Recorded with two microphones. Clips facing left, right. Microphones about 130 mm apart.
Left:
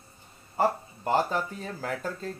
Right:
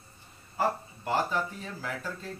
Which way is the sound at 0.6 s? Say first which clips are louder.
Left 3 dB; 45° left (ahead or behind).